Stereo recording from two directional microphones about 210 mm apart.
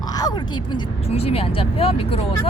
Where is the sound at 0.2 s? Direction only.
20° left (ahead or behind).